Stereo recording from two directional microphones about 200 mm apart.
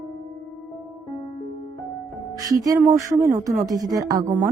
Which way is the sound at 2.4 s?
15° right (ahead or behind).